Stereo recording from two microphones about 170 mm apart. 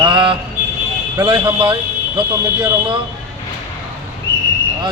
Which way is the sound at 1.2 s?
25° right (ahead or behind).